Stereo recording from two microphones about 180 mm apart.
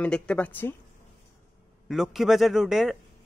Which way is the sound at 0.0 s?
5° left (ahead or behind).